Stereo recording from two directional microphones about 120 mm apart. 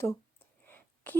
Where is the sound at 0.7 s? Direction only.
15° left (ahead or behind).